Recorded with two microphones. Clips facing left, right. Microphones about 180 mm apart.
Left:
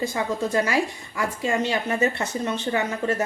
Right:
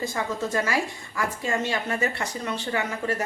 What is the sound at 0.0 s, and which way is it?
A woman's voice, 15° left (ahead or behind).